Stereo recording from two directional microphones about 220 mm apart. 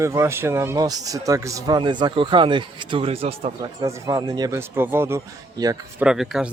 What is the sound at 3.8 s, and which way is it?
Speech, 15° right (ahead or behind).